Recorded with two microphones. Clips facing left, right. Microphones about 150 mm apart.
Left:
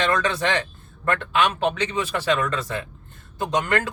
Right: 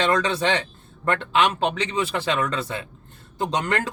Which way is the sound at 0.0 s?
30° right (ahead or behind).